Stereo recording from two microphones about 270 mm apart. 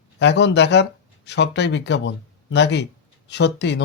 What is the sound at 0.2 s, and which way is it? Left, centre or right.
Speech, left.